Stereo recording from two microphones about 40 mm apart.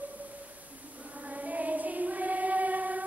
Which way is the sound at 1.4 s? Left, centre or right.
Right.